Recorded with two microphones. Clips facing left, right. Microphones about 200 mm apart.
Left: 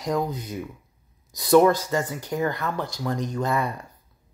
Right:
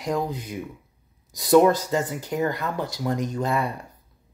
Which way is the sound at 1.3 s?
20° right (ahead or behind).